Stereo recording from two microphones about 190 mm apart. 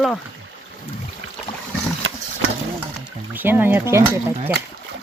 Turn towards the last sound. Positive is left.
turn(degrees=-15)  # may be behind; listen again after turning